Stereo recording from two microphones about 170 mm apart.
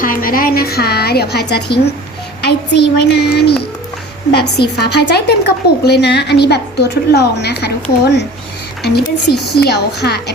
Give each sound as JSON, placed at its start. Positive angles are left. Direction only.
{"t": 0.0, "sound": "a woman's voice", "side_deg": 55}
{"t": 8.8, "sound": "a woman's voice", "side_deg": 75}